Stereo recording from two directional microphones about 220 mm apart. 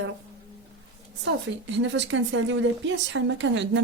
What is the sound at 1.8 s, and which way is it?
A woman's voice, 55° right (ahead or behind).